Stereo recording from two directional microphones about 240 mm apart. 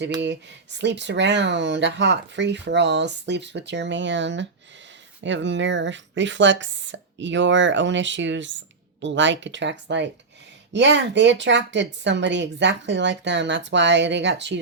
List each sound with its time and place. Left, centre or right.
0.8 s speech: right